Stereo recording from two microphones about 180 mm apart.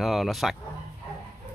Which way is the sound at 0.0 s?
Centre (ahead or behind).